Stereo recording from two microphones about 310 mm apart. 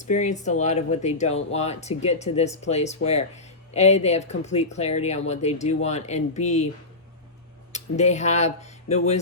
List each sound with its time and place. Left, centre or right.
0.0 s speech: left
7.7 s speech: left